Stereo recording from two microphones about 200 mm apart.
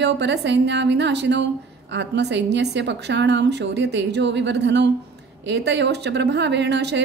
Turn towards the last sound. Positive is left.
turn(degrees=-60)  # may be behind; listen again after turning